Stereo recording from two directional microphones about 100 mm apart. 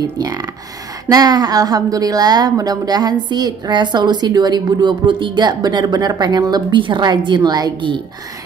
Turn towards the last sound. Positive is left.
turn(degrees=-40)  # may be behind; listen again after turning